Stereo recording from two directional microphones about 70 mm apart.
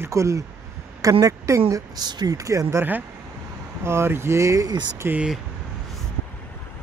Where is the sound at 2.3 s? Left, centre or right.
Right.